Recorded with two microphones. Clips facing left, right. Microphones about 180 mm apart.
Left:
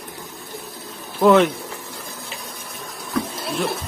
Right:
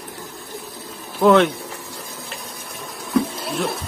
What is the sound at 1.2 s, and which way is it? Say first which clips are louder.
Speech: even; centre (ahead or behind).